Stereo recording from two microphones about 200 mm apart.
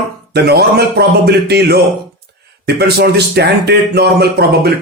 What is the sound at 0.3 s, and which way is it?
A man's voice, 55° right (ahead or behind).